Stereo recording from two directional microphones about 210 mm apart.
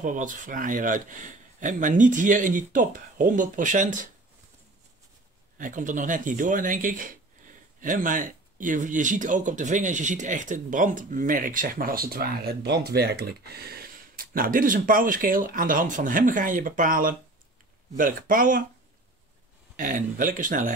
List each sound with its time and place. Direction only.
0.0 s speech: 40° right (ahead or behind)
5.6 s speech: 40° right (ahead or behind)
19.8 s speech: 40° right (ahead or behind)